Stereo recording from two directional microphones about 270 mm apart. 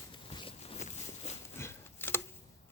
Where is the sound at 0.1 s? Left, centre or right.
Centre.